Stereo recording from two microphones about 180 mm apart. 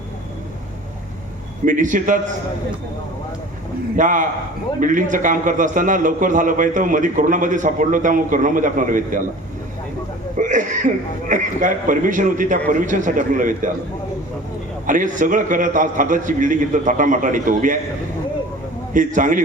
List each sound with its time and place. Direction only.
1.6 s a man's voice: 45° right (ahead or behind)
3.9 s a man's voice: 45° right (ahead or behind)
10.3 s a man's voice: 45° right (ahead or behind)
14.8 s a man's voice: 45° right (ahead or behind)
18.9 s a man's voice: 45° right (ahead or behind)